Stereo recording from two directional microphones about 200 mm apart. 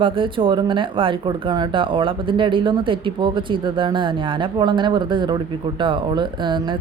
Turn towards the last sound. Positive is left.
turn(degrees=-25)  # may be behind; listen again after turning